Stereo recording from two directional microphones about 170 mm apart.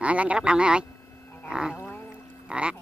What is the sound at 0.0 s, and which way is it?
Speech, 5° right (ahead or behind).